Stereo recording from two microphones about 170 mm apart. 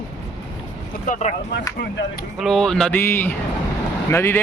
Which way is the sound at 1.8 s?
65° left (ahead or behind).